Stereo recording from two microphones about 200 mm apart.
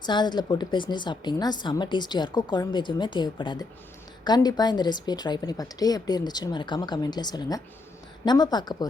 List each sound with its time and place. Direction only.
0.0 s a woman's voice: 20° left (ahead or behind)